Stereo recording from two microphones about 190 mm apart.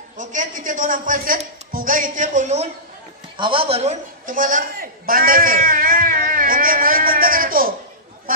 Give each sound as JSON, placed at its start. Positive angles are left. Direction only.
{"t": 0.2, "sound": "a man's voice", "side_deg": -40}